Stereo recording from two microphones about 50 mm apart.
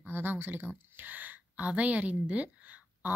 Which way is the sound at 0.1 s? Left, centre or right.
Right.